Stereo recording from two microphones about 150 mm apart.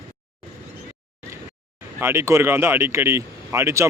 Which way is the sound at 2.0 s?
15° right (ahead or behind).